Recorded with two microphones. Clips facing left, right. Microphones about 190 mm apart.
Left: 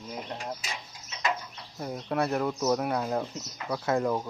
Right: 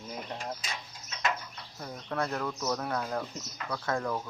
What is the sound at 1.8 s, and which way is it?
Speech, 20° left (ahead or behind).